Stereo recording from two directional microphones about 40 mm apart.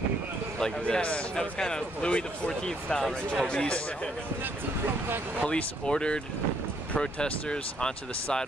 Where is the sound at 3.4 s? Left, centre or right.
Left.